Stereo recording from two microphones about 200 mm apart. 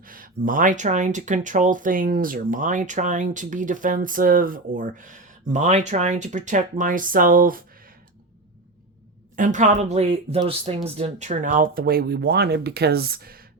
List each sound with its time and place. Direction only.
0.0 s speech: 45° right (ahead or behind)
9.3 s speech: 40° right (ahead or behind)